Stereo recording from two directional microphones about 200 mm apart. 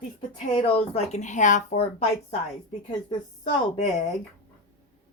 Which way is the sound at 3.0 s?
25° left (ahead or behind).